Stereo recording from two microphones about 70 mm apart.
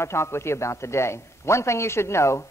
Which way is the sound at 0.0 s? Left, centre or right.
Left.